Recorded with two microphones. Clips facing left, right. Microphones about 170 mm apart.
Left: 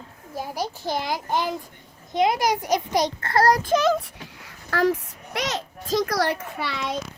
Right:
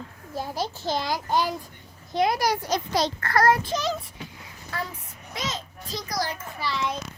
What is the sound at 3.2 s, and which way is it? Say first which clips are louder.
Speech: left 1 dB; 25° left (ahead or behind).